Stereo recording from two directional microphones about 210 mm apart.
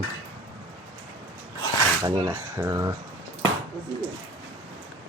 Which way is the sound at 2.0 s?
15° right (ahead or behind).